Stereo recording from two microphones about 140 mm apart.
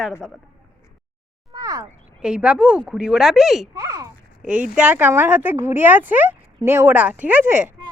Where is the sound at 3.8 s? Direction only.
25° right (ahead or behind).